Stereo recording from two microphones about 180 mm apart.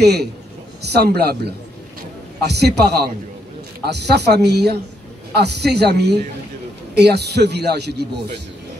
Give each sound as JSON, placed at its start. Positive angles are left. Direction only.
{"t": 0.0, "sound": "a man's voice", "side_deg": -65}